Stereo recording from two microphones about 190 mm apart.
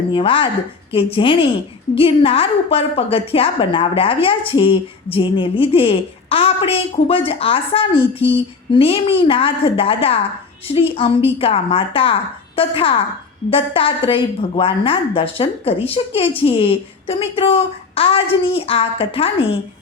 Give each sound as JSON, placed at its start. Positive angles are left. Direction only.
{"t": 0.1, "sound": "a woman's voice", "side_deg": 25}